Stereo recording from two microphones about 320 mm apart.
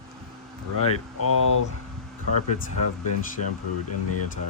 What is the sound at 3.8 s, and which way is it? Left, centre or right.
Speech, left.